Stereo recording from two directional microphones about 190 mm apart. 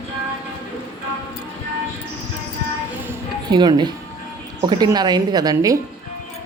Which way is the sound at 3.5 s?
25° right (ahead or behind).